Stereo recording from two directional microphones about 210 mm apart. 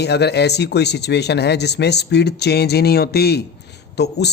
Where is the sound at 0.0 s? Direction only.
50° left (ahead or behind).